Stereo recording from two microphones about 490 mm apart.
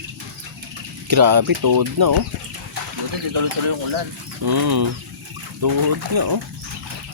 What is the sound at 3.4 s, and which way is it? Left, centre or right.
Speech, right.